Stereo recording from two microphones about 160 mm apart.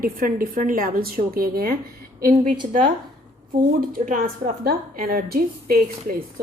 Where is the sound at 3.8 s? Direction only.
60° right (ahead or behind).